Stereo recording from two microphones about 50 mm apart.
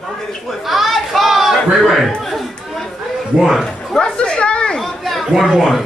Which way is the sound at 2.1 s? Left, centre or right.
Centre.